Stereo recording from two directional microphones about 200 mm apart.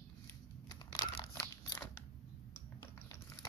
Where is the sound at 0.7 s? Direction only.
20° left (ahead or behind).